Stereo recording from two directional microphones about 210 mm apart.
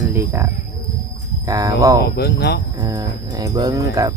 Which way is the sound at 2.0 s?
50° left (ahead or behind).